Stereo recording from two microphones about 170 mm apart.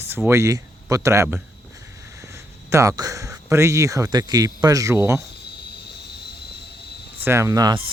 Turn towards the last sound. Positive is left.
turn(degrees=-20)  # may be behind; listen again after turning